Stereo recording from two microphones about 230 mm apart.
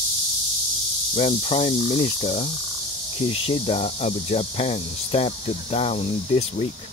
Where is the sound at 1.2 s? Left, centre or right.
Left.